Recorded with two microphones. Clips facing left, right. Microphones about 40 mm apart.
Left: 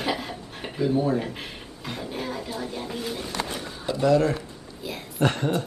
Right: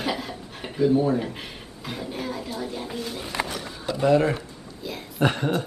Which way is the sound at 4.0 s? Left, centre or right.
Right.